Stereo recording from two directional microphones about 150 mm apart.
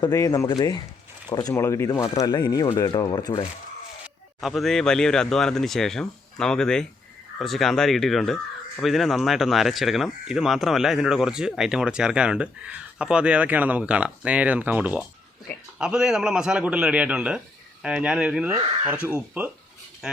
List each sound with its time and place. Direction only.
0.0 s speech: 25° left (ahead or behind)
4.0 s speech: centre (ahead or behind)